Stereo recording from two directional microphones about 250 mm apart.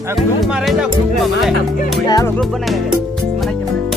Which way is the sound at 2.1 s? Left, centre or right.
Centre.